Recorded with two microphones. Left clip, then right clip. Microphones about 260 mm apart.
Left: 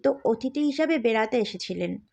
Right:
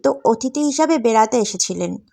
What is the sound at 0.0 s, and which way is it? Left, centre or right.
Speech, centre.